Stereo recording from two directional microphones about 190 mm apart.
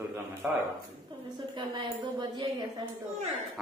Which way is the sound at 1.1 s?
25° right (ahead or behind).